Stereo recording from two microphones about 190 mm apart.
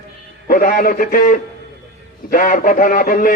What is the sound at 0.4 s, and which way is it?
A man's voice, 45° left (ahead or behind).